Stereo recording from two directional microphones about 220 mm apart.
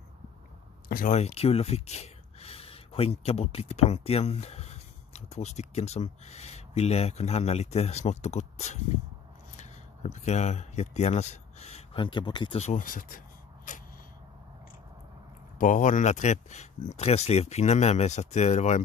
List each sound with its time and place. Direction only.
0.8 s speech: 35° left (ahead or behind)
15.5 s speech: 35° left (ahead or behind)